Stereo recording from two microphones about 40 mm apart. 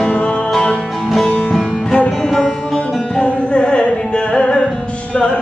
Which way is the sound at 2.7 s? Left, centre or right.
Left.